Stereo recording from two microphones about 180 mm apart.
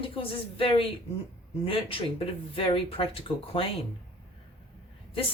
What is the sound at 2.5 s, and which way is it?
Speech, 30° left (ahead or behind).